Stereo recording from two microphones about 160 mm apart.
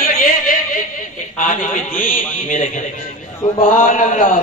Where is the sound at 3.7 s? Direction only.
55° left (ahead or behind).